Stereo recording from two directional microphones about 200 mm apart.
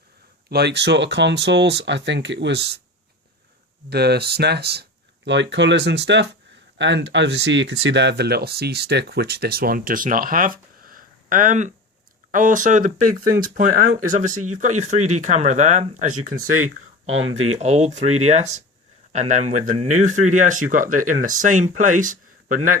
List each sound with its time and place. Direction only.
0.5 s speech: 55° right (ahead or behind)
3.8 s speech: 55° right (ahead or behind); by 16.3 s 40° right (ahead or behind)
17.2 s speech: 75° right (ahead or behind)
17.6 s speech: 35° right (ahead or behind)